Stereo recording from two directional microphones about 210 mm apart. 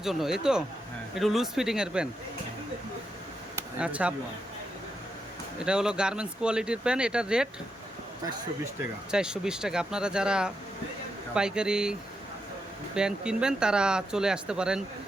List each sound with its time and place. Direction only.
0.0 s speech: centre (ahead or behind)
3.8 s speech: 5° right (ahead or behind)
5.6 s speech: 5° right (ahead or behind)
8.2 s speech: 15° right (ahead or behind)
9.1 s speech: 5° right (ahead or behind)